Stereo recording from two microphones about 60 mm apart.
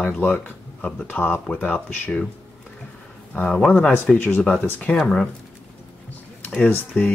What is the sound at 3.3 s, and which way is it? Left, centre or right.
Speech, centre.